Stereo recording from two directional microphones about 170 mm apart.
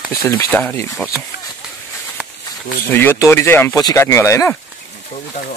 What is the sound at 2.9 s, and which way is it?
Speech, 15° left (ahead or behind).